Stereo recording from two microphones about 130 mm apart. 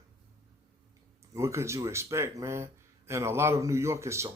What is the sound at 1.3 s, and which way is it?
Speech, 20° right (ahead or behind).